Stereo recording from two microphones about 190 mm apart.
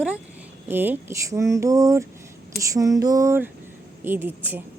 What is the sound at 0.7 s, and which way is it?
Speech, 10° right (ahead or behind).